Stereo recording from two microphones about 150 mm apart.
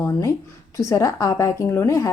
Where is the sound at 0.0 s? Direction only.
20° left (ahead or behind).